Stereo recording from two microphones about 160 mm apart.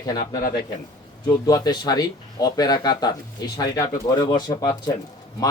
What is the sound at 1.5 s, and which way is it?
A man's voice, 25° left (ahead or behind).